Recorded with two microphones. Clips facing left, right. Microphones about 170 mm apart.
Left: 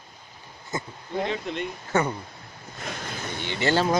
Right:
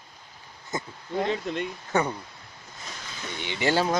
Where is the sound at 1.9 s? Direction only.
15° right (ahead or behind).